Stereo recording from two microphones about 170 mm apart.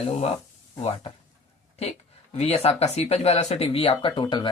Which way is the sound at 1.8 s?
40° left (ahead or behind).